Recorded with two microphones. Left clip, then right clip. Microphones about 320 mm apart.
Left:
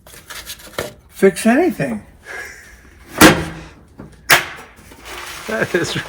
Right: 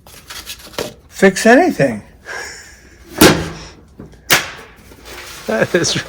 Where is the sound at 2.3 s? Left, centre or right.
Centre.